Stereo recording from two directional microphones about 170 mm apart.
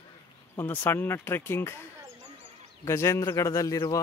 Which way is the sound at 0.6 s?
10° left (ahead or behind).